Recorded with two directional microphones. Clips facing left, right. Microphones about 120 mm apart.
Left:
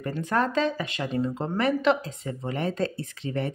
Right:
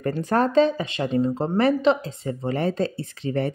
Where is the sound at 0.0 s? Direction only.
40° right (ahead or behind).